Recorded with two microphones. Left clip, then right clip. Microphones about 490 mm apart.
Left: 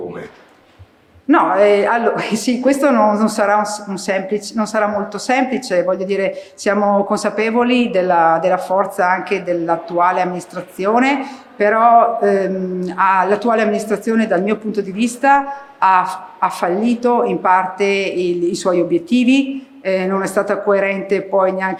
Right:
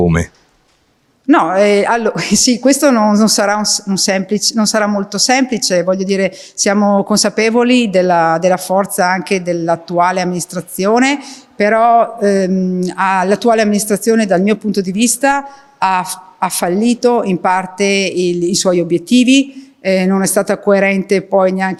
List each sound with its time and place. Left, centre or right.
1.3 s a woman's voice: right